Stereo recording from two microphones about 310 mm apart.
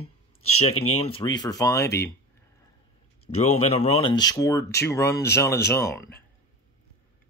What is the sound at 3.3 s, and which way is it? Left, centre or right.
Speech, left.